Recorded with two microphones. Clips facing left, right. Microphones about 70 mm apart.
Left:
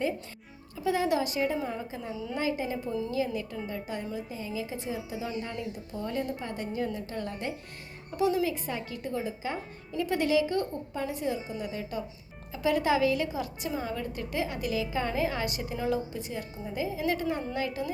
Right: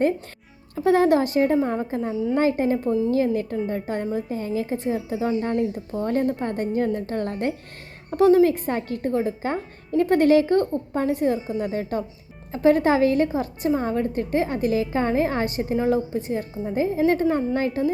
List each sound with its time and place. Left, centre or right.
0.8 s a woman's voice: right